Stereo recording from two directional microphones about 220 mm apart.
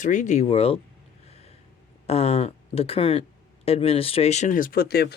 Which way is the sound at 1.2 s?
30° left (ahead or behind).